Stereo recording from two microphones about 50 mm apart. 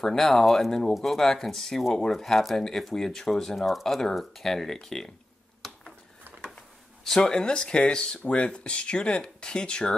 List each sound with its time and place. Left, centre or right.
0.0 s speech: centre
3.5 s speech: centre
5.6 s a sound: centre
7.2 s speech: centre